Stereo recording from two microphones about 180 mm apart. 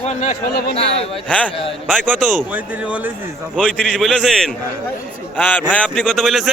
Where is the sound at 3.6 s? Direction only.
5° left (ahead or behind).